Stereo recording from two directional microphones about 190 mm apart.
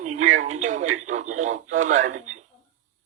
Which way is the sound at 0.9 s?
40° right (ahead or behind).